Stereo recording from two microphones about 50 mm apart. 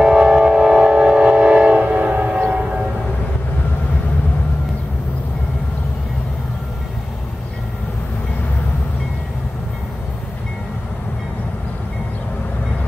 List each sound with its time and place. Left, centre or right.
0.0 s train: centre; by 2.4 s right